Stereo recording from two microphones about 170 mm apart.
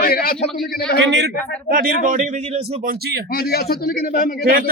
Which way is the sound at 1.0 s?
90° right.